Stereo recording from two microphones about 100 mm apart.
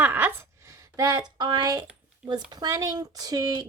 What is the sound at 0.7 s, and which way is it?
Speech, 35° right (ahead or behind).